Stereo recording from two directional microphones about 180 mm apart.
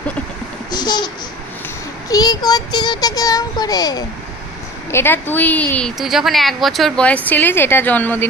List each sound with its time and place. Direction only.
0.7 s speech: 25° left (ahead or behind)